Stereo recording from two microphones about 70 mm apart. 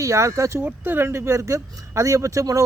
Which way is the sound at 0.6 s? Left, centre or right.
Right.